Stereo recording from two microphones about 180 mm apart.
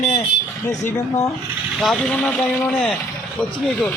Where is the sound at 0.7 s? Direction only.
15° left (ahead or behind).